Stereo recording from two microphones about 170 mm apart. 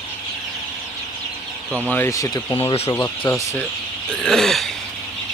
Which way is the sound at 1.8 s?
15° left (ahead or behind).